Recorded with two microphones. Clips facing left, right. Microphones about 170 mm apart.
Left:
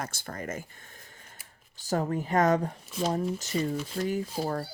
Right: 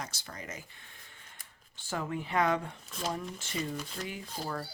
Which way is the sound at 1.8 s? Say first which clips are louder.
Left 7 dB; 40° left (ahead or behind).